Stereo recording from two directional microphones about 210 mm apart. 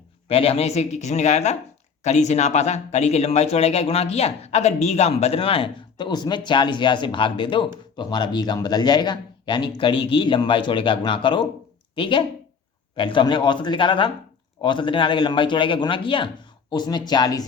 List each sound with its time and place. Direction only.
0.3 s speech: 30° left (ahead or behind)